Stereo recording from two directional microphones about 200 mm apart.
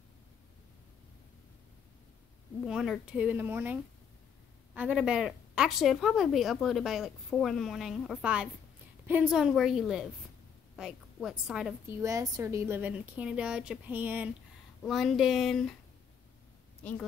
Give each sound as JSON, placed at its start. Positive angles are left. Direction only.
{"t": 2.6, "sound": "a woman's voice", "side_deg": 0}
{"t": 12.0, "sound": "a woman's voice", "side_deg": -15}
{"t": 16.8, "sound": "a woman's voice", "side_deg": 10}